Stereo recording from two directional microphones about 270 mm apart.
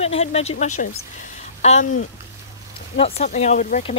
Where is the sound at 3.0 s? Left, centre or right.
Left.